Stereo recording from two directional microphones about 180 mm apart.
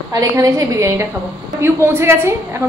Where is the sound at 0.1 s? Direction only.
20° right (ahead or behind).